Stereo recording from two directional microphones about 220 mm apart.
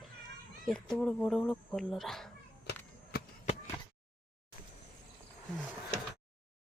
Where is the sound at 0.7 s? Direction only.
5° left (ahead or behind).